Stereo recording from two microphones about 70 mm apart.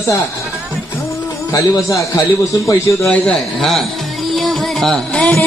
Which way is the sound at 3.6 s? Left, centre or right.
Centre.